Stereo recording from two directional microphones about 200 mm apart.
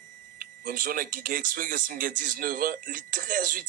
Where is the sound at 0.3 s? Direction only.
45° right (ahead or behind).